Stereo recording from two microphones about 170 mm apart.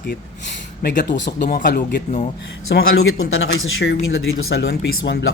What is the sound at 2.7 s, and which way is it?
Speech, 70° left (ahead or behind).